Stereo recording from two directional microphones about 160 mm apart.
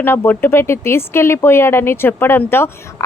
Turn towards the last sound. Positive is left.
turn(degrees=15)  # may be behind; listen again after turning